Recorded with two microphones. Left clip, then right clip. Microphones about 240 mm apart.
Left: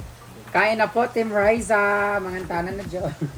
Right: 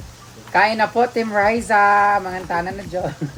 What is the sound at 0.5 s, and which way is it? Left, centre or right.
Speech, centre.